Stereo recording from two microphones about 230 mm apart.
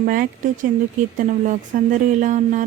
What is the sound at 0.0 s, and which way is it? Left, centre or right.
Speech, right.